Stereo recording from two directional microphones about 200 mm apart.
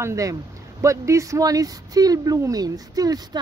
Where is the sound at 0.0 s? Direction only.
15° right (ahead or behind).